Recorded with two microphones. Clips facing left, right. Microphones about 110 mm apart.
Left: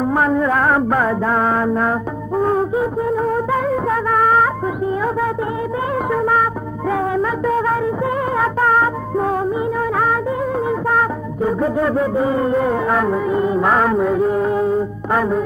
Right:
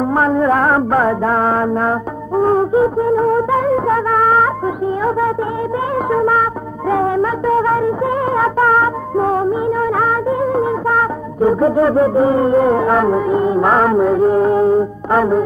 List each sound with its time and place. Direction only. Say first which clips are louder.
0.0 s music: right 2 dB; 35° right (ahead or behind)
6.9 s music: right 4 dB; 35° right (ahead or behind)
10.4 s music of bollywood: right 4 dB; 35° right (ahead or behind)
11.4 s music: right 5 dB; 35° right (ahead or behind)